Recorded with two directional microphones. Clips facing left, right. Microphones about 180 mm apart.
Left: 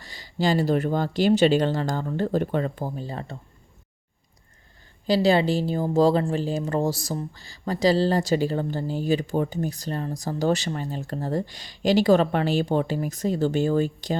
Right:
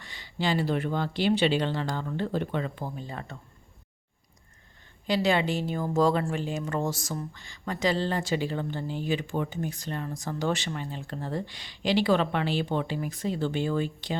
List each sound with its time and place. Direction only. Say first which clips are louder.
0.0 s speech: left 5 dB; 40° left (ahead or behind)
5.0 s speech: left 5 dB; 35° left (ahead or behind)